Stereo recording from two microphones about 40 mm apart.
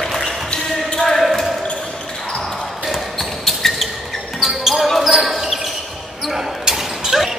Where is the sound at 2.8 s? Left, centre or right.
Centre.